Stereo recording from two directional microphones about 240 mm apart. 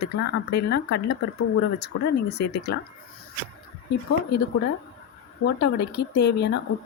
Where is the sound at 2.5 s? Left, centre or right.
Left.